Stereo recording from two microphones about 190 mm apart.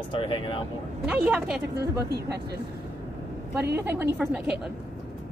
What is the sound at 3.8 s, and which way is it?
Speech, 15° right (ahead or behind).